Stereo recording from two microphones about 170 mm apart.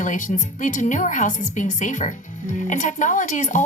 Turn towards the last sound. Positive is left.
turn(degrees=45)  # may be behind; listen again after turning